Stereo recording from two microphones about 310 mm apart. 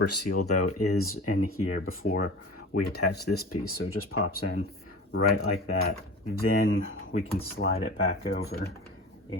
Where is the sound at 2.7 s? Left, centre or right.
Left.